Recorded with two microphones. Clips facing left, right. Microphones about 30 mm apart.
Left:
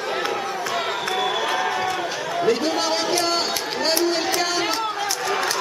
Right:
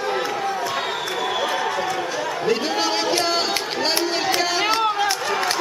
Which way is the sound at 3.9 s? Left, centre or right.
Centre.